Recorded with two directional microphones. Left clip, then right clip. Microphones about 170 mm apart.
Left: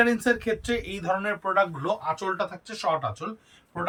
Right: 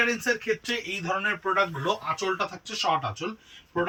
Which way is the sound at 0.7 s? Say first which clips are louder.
Left 2 dB; 35° left (ahead or behind).